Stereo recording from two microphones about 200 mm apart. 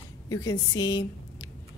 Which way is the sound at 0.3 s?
15° left (ahead or behind).